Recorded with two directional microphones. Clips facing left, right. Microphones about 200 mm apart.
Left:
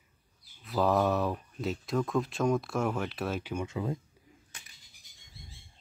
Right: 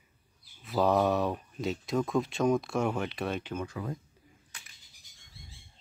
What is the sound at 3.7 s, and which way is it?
Speech, 20° left (ahead or behind).